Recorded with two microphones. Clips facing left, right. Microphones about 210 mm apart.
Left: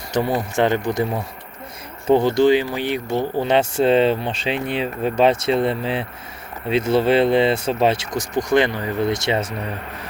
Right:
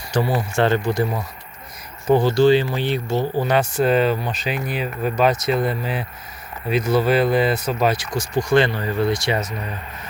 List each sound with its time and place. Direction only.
0.1 s speech: 20° left (ahead or behind)
3.3 s speech: 25° left (ahead or behind)